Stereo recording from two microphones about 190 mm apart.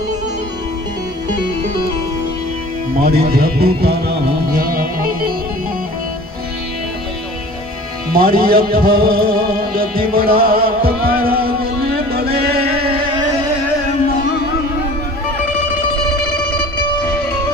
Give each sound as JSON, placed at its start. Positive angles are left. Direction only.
{"t": 3.0, "sound": "music", "side_deg": -55}
{"t": 8.1, "sound": "music", "side_deg": -50}
{"t": 12.8, "sound": "a sound", "side_deg": -25}